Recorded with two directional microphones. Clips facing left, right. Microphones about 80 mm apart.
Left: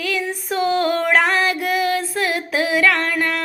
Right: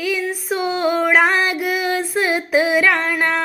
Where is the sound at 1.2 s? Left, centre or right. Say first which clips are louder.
Right 1 dB; centre.